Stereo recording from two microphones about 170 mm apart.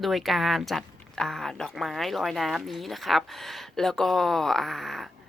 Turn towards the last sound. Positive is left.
turn(degrees=0)  # may be behind; listen again after turning